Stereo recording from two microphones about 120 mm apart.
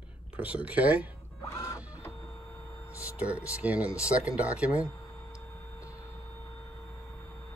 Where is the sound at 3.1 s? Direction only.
10° right (ahead or behind).